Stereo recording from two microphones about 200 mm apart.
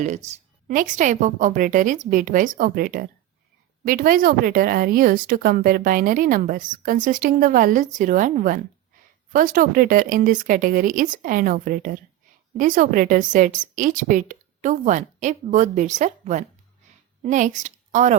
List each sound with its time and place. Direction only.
0.0 s a woman's voice: 35° right (ahead or behind)